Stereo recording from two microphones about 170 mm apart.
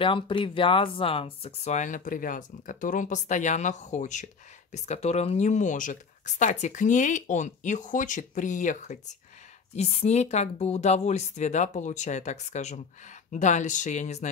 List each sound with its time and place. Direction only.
0.0 s speech: 30° left (ahead or behind)